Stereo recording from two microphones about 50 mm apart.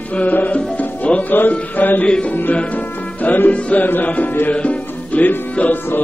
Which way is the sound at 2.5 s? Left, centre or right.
Left.